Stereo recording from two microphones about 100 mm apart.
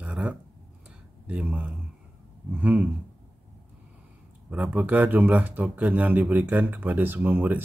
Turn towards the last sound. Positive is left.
turn(degrees=-20)  # may be behind; listen again after turning